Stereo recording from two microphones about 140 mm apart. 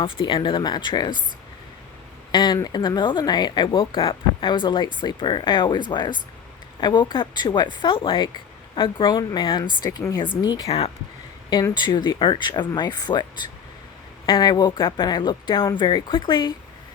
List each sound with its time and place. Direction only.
0.0 s speech: 35° left (ahead or behind)
2.3 s speech: 30° left (ahead or behind)
10.7 s speech: 45° left (ahead or behind)
11.7 s speech: 35° left (ahead or behind)